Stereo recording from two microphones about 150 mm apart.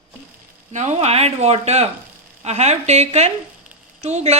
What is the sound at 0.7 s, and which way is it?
Speech, 50° right (ahead or behind).